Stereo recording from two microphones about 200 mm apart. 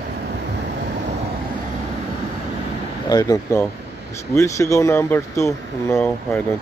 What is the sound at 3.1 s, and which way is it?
Speech, 20° left (ahead or behind).